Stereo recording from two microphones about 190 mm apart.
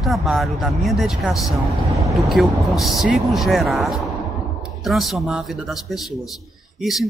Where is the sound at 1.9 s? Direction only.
15° right (ahead or behind).